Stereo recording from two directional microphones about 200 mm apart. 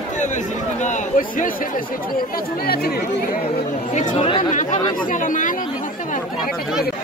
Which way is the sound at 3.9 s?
35° left (ahead or behind).